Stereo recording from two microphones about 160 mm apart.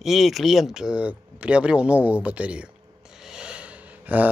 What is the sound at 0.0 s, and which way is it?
A man's voice, centre (ahead or behind).